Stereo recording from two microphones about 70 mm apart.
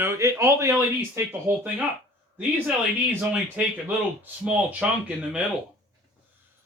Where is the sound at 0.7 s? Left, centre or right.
Right.